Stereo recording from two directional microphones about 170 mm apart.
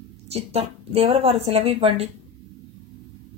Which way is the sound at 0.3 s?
35° right (ahead or behind).